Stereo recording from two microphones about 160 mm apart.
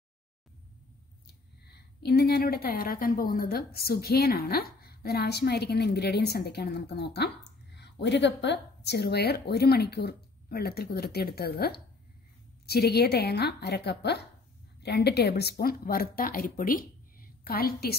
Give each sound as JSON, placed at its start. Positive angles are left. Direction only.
{"t": 1.2, "sound": "a woman's voice", "side_deg": 90}